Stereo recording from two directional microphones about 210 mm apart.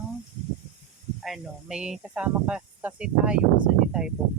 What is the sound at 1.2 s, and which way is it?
Speech, centre (ahead or behind).